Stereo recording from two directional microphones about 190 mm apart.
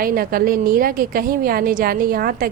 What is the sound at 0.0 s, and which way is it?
A woman's voice, 50° right (ahead or behind).